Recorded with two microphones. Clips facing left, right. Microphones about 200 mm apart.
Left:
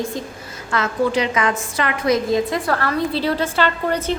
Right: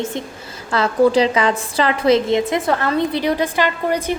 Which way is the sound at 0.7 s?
30° right (ahead or behind).